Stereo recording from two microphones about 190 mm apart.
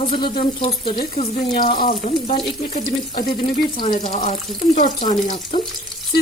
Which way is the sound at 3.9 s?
40° left (ahead or behind).